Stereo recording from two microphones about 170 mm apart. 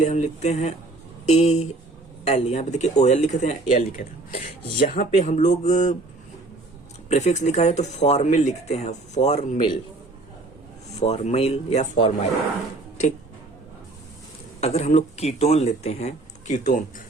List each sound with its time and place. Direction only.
0.0 s speech: 40° left (ahead or behind)
7.1 s speech: 40° left (ahead or behind)
11.0 s speech: 40° left (ahead or behind)
14.6 s speech: 40° left (ahead or behind)